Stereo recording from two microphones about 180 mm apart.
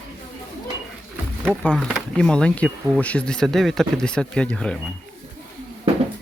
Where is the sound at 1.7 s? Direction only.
Centre (ahead or behind).